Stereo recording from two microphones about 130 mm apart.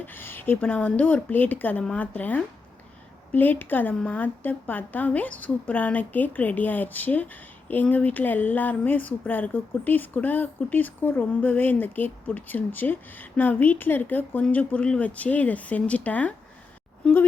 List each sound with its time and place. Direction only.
0.0 s a woman's voice: 15° left (ahead or behind)